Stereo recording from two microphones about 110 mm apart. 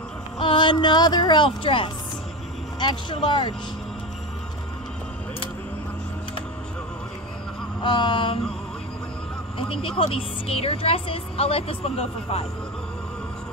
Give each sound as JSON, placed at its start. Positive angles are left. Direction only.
{"t": 0.4, "sound": "speech", "side_deg": 50}
{"t": 7.8, "sound": "speech", "side_deg": 50}
{"t": 9.6, "sound": "a woman's voice", "side_deg": 55}